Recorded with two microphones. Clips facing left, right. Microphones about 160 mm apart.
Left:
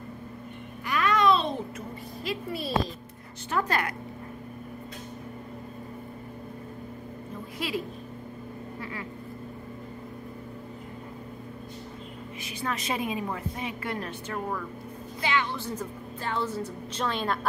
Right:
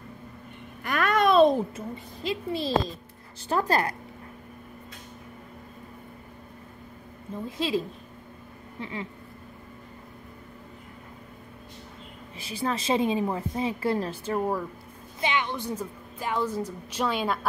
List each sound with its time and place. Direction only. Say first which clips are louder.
0.8 s babbling: even; 55° right (ahead or behind)
2.2 s a child's voice: right 4 dB; 25° right (ahead or behind)
7.4 s a child's voice: right 5 dB; 25° right (ahead or behind)
12.4 s a woman's voice: right 4 dB; 30° right (ahead or behind)
15.2 s a woman's voice: right 1 dB; 15° right (ahead or behind)